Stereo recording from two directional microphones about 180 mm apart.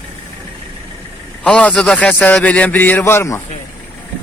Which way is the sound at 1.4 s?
5° left (ahead or behind).